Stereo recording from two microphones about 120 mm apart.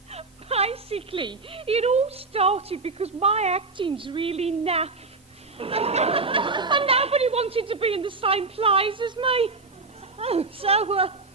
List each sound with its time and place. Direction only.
0.1 s a woman's voice: 60° right (ahead or behind)
3.8 s a woman's voice: 45° right (ahead or behind)